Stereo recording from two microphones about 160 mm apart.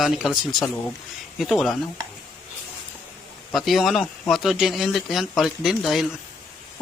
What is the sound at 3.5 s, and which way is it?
Speech, centre (ahead or behind).